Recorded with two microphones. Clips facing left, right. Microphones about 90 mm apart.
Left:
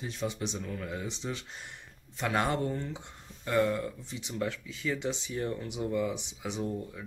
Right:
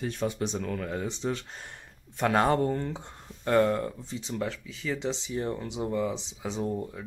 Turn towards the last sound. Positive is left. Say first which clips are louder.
# right 3 dB
turn(degrees=-35)  # may be behind; listen again after turning